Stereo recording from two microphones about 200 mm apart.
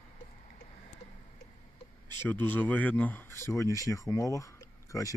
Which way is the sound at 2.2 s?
10° left (ahead or behind).